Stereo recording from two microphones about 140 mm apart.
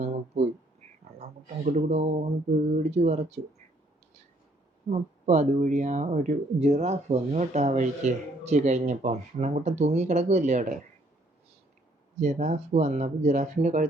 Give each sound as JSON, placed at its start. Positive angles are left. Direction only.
{"t": 0.0, "sound": "a sound", "side_deg": -50}
{"t": 1.2, "sound": "speech", "side_deg": -55}
{"t": 4.9, "sound": "speech", "side_deg": -60}
{"t": 12.1, "sound": "speech", "side_deg": -55}